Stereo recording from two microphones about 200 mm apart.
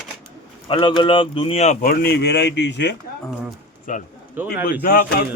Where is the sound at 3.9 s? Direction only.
40° left (ahead or behind).